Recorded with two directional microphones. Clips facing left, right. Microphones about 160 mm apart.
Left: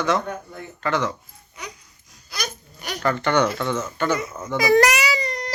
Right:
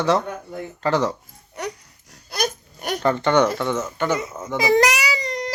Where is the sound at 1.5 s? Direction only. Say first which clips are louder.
Right 9 dB; 70° right (ahead or behind); by 3.0 s 55° right (ahead or behind).